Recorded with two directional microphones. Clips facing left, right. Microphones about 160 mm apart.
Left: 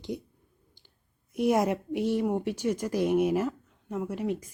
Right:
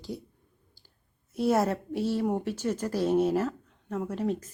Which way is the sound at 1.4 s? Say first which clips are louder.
Even; 15° left (ahead or behind).